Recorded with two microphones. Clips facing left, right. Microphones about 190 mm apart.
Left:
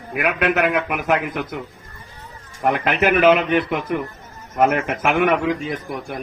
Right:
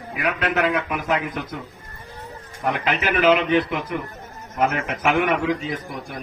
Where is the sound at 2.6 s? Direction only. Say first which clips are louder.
Left 5 dB; 55° left (ahead or behind).